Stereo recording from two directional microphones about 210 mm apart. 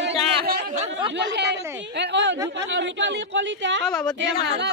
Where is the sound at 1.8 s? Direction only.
55° right (ahead or behind).